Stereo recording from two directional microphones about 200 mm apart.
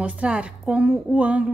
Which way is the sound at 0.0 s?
5° right (ahead or behind).